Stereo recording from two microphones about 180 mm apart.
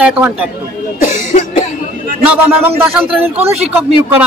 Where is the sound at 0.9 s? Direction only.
45° left (ahead or behind).